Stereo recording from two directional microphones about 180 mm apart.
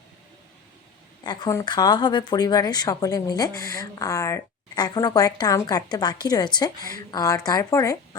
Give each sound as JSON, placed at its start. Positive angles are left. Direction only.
{"t": 1.2, "sound": "a woman's voice", "side_deg": 25}